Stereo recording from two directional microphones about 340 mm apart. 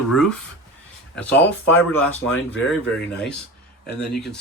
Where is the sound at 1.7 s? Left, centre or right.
Left.